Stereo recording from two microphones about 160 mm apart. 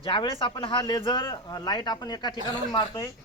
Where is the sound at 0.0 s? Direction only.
35° left (ahead or behind).